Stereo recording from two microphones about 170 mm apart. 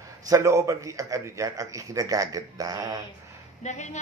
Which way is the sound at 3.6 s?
45° left (ahead or behind).